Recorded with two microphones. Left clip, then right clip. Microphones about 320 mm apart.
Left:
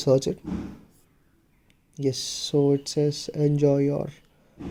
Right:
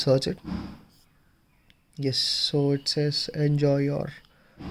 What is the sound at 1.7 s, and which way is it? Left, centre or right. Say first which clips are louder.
Speech: left 1 dB; centre.